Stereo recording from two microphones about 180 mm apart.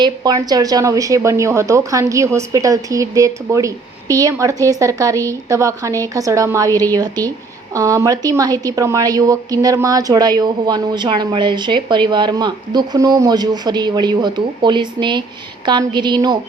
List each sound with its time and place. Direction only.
0.0 s a woman's voice: 20° right (ahead or behind)